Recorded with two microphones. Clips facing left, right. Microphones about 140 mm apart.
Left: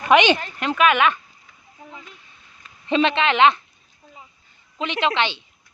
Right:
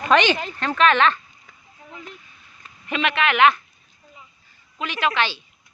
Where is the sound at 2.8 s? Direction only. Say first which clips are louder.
Left 4 dB; 30° left (ahead or behind).